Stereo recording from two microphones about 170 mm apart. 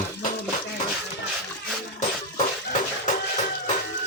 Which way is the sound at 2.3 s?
45° left (ahead or behind).